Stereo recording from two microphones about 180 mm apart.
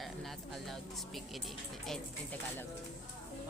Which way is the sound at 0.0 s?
Centre (ahead or behind).